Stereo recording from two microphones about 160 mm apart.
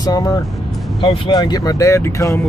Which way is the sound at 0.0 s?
25° left (ahead or behind).